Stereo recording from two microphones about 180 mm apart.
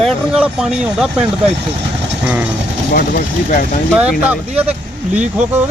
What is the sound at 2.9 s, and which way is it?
Speech, 50° left (ahead or behind).